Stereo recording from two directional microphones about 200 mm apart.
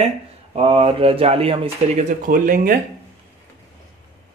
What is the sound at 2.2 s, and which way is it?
Speech, 45° right (ahead or behind).